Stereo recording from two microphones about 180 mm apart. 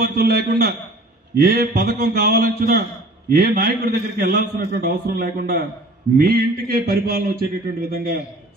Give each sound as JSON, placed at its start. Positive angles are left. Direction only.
{"t": 0.0, "sound": "a man's voice", "side_deg": -55}